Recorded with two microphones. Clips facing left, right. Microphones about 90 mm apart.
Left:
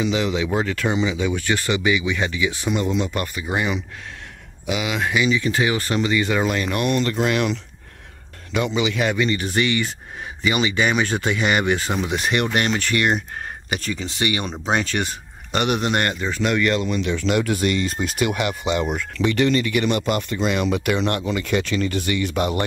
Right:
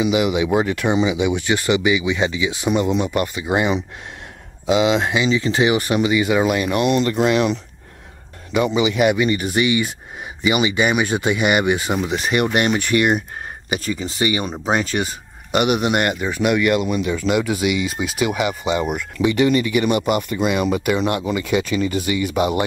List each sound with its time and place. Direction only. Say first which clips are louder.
0.0 s speech: right 4 dB; 15° right (ahead or behind)
12.4 s speech: right 3 dB; 15° right (ahead or behind)